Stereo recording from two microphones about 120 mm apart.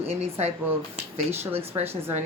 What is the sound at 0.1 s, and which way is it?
Speech, 65° right (ahead or behind).